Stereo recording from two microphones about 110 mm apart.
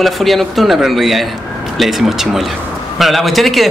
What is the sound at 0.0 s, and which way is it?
Speech, centre (ahead or behind).